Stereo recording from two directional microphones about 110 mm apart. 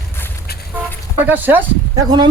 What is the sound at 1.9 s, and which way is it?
Speech, 35° right (ahead or behind).